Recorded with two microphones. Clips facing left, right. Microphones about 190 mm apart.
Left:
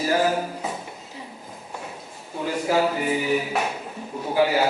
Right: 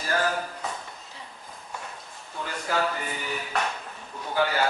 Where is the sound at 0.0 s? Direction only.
10° left (ahead or behind).